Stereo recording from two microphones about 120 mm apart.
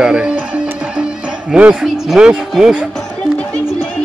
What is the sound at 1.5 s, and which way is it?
A man's voice, 10° right (ahead or behind).